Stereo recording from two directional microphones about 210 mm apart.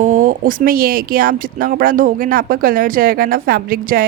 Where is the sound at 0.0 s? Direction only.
35° right (ahead or behind).